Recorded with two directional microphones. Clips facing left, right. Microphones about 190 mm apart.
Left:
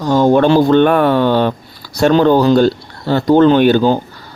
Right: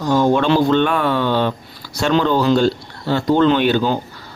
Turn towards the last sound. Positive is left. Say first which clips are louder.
# left 6 dB
turn(degrees=45)  # may be behind; listen again after turning